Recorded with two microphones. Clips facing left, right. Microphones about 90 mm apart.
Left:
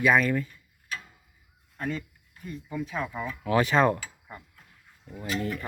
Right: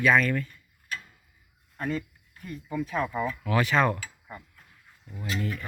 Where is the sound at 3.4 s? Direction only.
25° left (ahead or behind).